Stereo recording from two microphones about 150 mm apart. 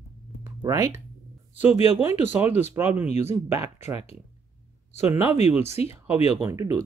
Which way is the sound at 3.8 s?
45° left (ahead or behind).